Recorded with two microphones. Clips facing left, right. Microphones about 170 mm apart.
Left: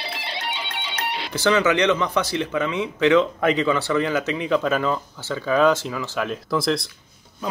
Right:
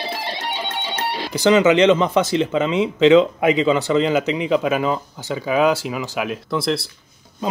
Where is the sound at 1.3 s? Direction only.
20° right (ahead or behind); by 6.8 s centre (ahead or behind).